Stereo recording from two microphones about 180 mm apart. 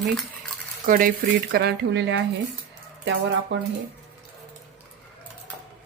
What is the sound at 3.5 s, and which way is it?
Speech, 80° right.